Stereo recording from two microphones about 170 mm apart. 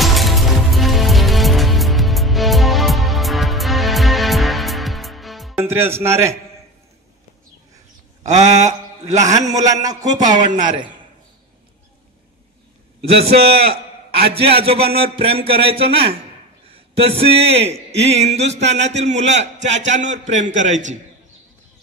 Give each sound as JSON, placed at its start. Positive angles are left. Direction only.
{"t": 0.0, "sound": "music", "side_deg": 0}
{"t": 5.6, "sound": "speech", "side_deg": -15}
{"t": 8.2, "sound": "a man's voice", "side_deg": -45}
{"t": 9.2, "sound": "a man's voice", "side_deg": -20}
{"t": 13.6, "sound": "a sound", "side_deg": -70}
{"t": 14.6, "sound": "a man's voice", "side_deg": -35}